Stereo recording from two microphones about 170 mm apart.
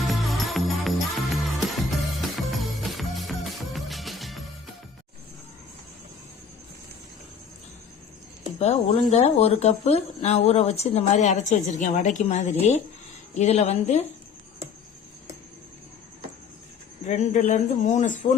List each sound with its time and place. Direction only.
0.1 s music: centre (ahead or behind)
8.5 s speech: 40° left (ahead or behind)
17.0 s speech: 45° left (ahead or behind)